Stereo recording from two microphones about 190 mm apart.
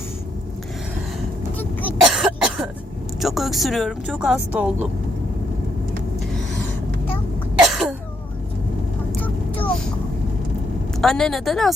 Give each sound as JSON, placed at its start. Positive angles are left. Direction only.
{"t": 1.5, "sound": "throat clearing", "side_deg": 10}
{"t": 2.0, "sound": "cough", "side_deg": -5}
{"t": 3.2, "sound": "speech", "side_deg": 0}
{"t": 7.7, "sound": "cough", "side_deg": 0}
{"t": 9.2, "sound": "vehicle", "side_deg": 10}
{"t": 11.0, "sound": "speech", "side_deg": 0}